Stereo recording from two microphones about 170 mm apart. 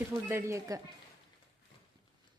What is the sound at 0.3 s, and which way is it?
Speech, 15° right (ahead or behind).